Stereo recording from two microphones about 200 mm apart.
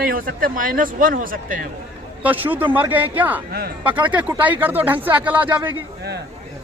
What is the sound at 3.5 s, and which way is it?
Speech, 45° right (ahead or behind).